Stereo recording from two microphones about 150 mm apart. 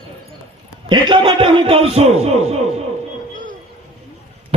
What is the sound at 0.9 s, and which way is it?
A man's voice, 30° right (ahead or behind).